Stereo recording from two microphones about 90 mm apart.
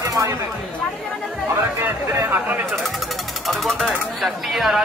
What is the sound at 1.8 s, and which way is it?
Speech, 30° right (ahead or behind).